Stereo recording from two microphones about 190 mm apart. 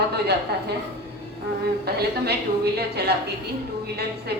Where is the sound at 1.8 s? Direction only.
60° right (ahead or behind).